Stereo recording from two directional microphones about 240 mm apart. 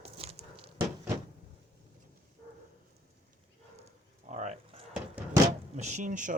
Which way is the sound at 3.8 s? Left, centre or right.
Right.